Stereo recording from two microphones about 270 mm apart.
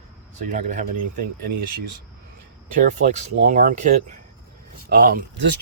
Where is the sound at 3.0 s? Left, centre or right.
Right.